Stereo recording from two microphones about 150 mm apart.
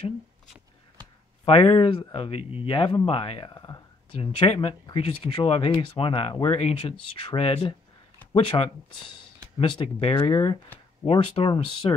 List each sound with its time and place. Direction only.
1.4 s speech: 40° left (ahead or behind)